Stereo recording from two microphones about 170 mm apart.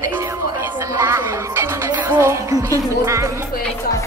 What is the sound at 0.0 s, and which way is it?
Music, 15° right (ahead or behind).